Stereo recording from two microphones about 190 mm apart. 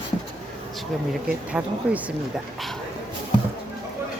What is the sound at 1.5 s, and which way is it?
Speech, 10° right (ahead or behind).